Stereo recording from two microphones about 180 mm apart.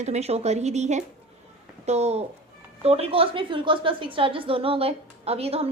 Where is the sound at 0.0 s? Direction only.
35° right (ahead or behind).